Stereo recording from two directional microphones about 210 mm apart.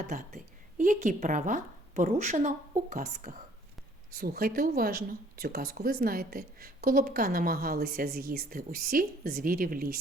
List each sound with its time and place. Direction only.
0.1 s speech: 35° right (ahead or behind)